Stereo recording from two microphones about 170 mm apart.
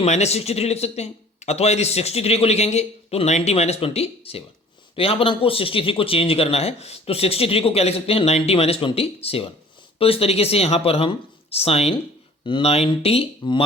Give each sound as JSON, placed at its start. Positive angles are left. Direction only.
{"t": 0.0, "sound": "speech", "side_deg": 40}